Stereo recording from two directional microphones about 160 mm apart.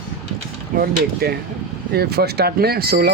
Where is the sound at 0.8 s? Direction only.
75° right (ahead or behind).